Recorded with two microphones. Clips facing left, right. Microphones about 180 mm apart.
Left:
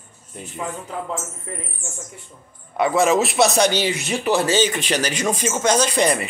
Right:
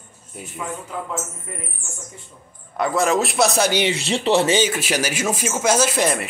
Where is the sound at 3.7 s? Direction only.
25° right (ahead or behind).